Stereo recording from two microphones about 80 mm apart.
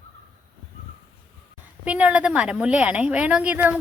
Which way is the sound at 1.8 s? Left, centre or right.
Centre.